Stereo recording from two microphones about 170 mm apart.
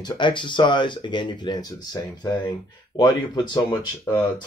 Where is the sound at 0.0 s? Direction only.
30° left (ahead or behind).